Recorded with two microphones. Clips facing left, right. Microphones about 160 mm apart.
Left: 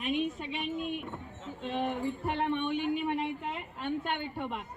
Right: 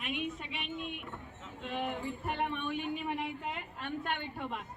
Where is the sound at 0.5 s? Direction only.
Centre (ahead or behind).